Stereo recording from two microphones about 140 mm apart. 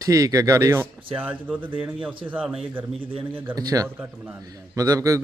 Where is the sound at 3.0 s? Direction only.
40° right (ahead or behind).